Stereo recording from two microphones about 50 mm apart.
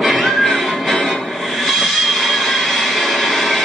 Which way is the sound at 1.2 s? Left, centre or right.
Centre.